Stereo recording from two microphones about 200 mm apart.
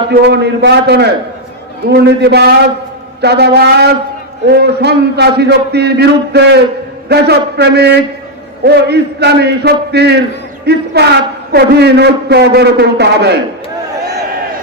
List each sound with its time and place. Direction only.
0.1 s a man's voice: 55° right (ahead or behind)